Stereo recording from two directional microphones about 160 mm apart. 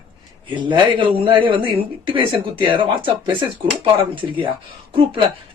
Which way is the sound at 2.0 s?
30° right (ahead or behind).